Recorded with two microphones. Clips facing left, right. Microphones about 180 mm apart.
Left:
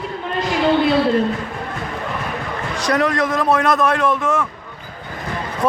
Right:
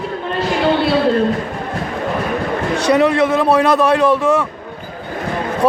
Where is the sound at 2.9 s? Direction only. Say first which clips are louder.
Right 5 dB; 30° right (ahead or behind).